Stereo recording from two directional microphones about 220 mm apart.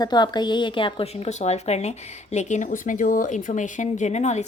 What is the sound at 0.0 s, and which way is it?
A woman's voice, 20° left (ahead or behind).